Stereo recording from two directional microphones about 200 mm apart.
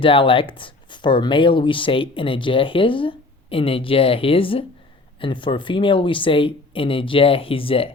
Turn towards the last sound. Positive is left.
turn(degrees=25)  # may be behind; listen again after turning